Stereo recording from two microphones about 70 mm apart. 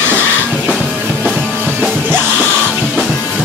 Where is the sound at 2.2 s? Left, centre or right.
Centre.